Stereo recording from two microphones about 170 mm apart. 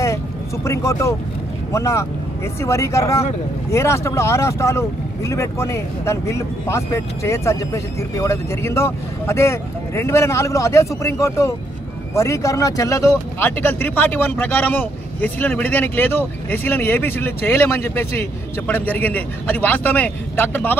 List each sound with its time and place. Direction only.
0.7 s speech: 15° left (ahead or behind)